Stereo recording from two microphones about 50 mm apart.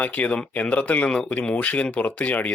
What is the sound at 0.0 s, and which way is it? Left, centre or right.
Speech, left.